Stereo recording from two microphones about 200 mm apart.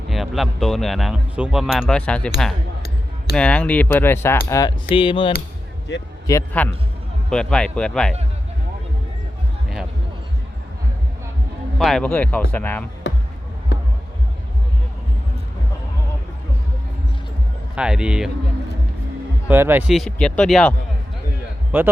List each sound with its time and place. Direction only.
0.1 s speech: centre (ahead or behind)
4.9 s a sound: 25° left (ahead or behind)
6.2 s speech: 10° left (ahead or behind)
11.8 s speech: centre (ahead or behind)
13.0 s music: 60° left (ahead or behind)
13.7 s a sound: 60° left (ahead or behind)
17.7 s speech: 5° right (ahead or behind)
19.5 s speech: 10° right (ahead or behind)
20.0 s speech: 5° left (ahead or behind)